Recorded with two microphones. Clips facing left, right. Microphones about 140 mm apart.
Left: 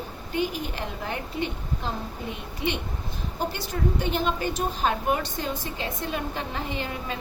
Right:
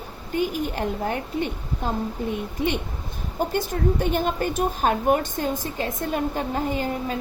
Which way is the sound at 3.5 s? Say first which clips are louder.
Right 5 dB; 50° right (ahead or behind).